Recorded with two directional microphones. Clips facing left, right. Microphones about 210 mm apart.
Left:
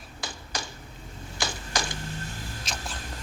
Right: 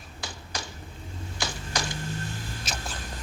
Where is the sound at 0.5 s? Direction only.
50° left (ahead or behind).